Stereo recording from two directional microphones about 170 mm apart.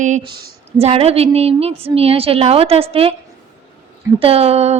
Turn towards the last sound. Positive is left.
turn(degrees=-40)  # may be behind; listen again after turning